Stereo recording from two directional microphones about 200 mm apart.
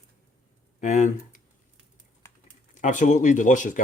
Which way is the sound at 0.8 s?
40° left (ahead or behind).